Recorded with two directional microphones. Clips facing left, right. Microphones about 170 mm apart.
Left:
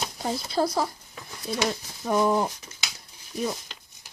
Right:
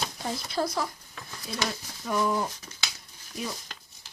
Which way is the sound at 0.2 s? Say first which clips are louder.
Left 5 dB; 30° left (ahead or behind).